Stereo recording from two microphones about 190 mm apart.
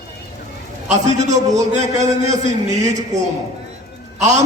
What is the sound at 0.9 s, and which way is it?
A man's voice, 40° right (ahead or behind).